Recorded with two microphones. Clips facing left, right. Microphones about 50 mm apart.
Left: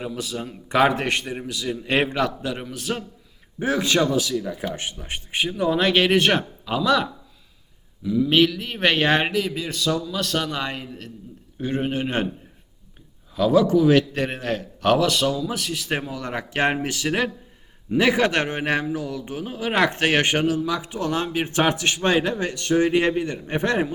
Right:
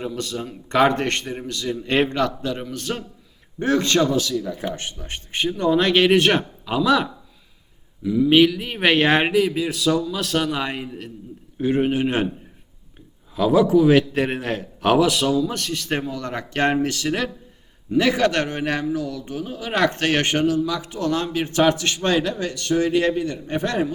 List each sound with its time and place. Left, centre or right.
0.0 s a man's voice: centre
13.3 s a man's voice: centre; by 23.9 s left